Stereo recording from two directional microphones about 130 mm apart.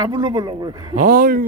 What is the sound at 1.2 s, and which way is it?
Speech, 90° right.